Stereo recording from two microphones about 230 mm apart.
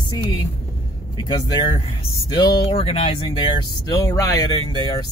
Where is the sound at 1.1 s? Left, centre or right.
Centre.